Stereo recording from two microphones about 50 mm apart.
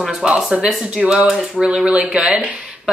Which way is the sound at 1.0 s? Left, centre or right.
Centre.